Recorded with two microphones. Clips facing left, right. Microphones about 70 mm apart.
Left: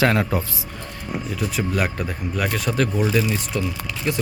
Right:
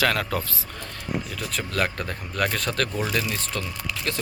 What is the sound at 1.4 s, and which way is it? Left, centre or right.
A man's voice, centre.